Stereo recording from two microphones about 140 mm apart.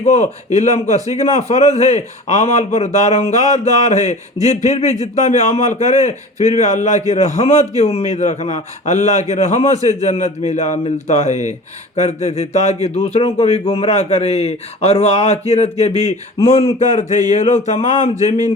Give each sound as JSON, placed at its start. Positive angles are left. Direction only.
{"t": 0.0, "sound": "a man's voice", "side_deg": 55}
{"t": 17.2, "sound": "speech", "side_deg": 60}